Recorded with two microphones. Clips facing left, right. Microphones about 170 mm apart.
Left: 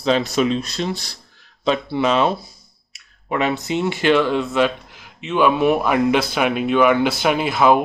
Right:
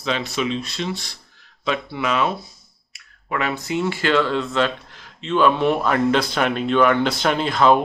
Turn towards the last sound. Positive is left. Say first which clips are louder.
# left 1 dB
turn(degrees=10)  # may be behind; listen again after turning